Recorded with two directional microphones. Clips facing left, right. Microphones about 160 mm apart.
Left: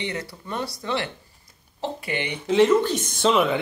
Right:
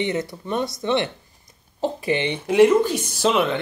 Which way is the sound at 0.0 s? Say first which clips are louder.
Right 7 dB; 25° right (ahead or behind).